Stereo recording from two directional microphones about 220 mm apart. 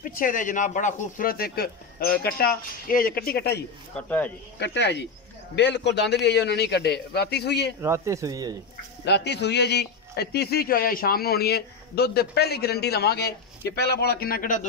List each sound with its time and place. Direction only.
0.0 s speech: 40° left (ahead or behind)
3.9 s speech: 5° left (ahead or behind)
4.6 s a man's voice: 50° left (ahead or behind)
7.8 s speech: 15° right (ahead or behind)
9.0 s a man's voice: 50° left (ahead or behind)